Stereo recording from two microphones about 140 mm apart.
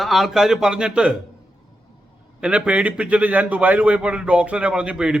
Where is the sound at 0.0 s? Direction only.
Centre (ahead or behind).